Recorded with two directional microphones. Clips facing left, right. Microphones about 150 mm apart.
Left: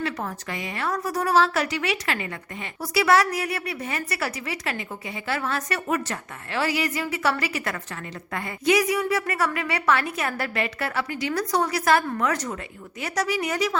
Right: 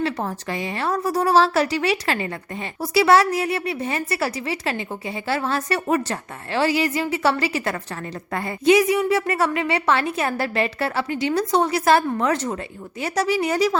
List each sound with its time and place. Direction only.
0.0 s a woman's voice: 30° right (ahead or behind)